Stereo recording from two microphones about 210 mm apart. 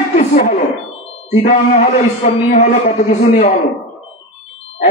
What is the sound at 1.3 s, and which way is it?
A man's voice, 35° left (ahead or behind).